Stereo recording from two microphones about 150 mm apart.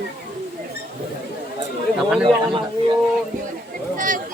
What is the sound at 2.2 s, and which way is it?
Speech, 35° right (ahead or behind).